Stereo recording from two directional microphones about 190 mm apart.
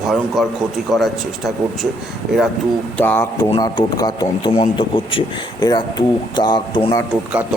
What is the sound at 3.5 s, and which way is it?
A man's voice, 25° left (ahead or behind).